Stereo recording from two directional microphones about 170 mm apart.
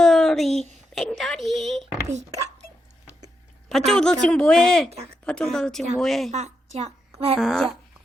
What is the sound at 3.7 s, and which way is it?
A woman's voice, centre (ahead or behind).